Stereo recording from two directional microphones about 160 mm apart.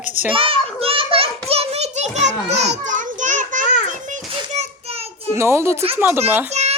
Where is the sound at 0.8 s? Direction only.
35° right (ahead or behind).